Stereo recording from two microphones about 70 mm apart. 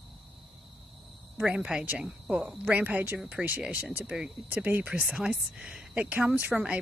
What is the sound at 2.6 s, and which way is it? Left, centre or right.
Speech, right.